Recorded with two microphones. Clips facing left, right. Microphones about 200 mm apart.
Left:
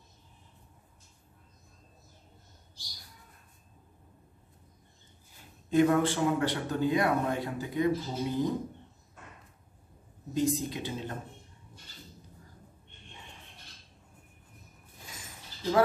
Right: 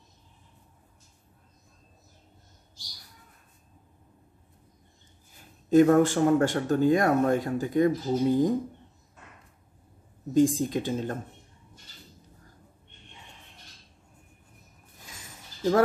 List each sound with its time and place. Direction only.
5.7 s speech: 45° right (ahead or behind)
10.3 s speech: 45° right (ahead or behind)